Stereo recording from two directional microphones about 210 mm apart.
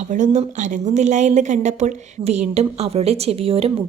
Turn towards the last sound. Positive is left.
turn(degrees=-25)  # may be behind; listen again after turning